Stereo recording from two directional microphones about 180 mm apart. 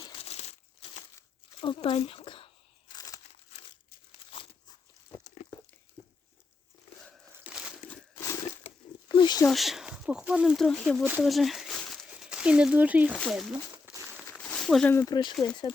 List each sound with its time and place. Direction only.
0.0 s crumpling: 30° left (ahead or behind)
1.6 s speech: 30° left (ahead or behind)
2.9 s crumpling: 20° left (ahead or behind)
5.2 s a sound: 45° left (ahead or behind)
7.0 s crumpling: centre (ahead or behind)
7.9 s crumpling: 10° left (ahead or behind)
9.0 s a sound: 25° left (ahead or behind)
9.5 s speech: centre (ahead or behind)
13.7 s crumpling: 15° right (ahead or behind)
14.3 s a sound: centre (ahead or behind)
15.0 s speech: 25° left (ahead or behind)